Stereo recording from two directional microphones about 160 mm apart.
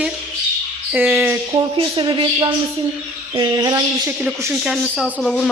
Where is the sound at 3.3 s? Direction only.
25° right (ahead or behind).